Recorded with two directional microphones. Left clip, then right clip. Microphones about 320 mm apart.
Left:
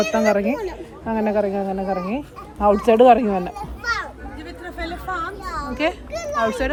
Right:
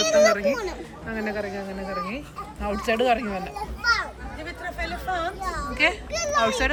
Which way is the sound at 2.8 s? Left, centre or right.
Left.